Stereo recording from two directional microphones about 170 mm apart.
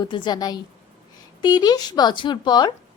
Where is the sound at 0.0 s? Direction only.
25° left (ahead or behind).